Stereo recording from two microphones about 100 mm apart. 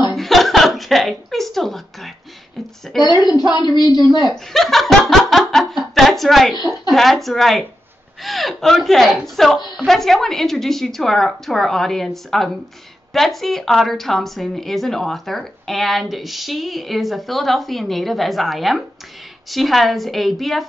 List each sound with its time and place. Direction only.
0.1 s a sound: centre (ahead or behind)
2.9 s a woman's voice: centre (ahead or behind)
3.3 s a woman's voice: 45° left (ahead or behind)
4.3 s a woman's voice: centre (ahead or behind)